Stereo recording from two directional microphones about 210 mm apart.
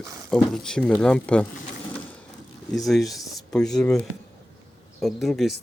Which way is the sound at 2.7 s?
Centre (ahead or behind).